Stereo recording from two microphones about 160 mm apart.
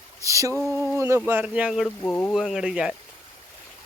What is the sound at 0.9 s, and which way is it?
Speech, 15° right (ahead or behind).